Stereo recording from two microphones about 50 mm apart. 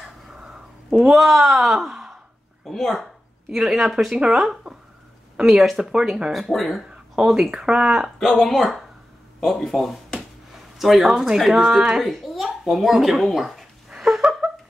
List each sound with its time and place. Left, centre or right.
0.3 s a sound: centre
0.8 s speech: centre
2.6 s speech: centre
3.4 s speech: centre
6.4 s speech: centre
8.2 s speech: centre
10.5 s a sound: centre
11.3 s speech: centre
11.6 s speech: centre
12.0 s speech: centre
13.8 s a sound: centre